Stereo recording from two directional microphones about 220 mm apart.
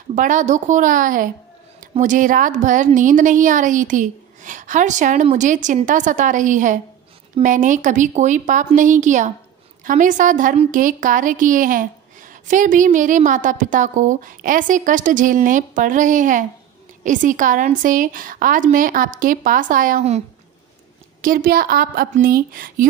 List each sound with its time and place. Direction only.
0.1 s a woman's voice: 35° right (ahead or behind)